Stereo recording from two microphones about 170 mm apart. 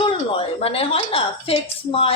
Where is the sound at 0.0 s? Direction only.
30° left (ahead or behind).